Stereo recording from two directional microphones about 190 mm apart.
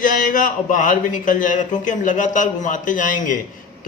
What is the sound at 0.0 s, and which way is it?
Speech, 45° left (ahead or behind).